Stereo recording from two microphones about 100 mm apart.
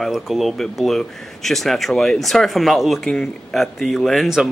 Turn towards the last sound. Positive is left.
turn(degrees=-5)  # may be behind; listen again after turning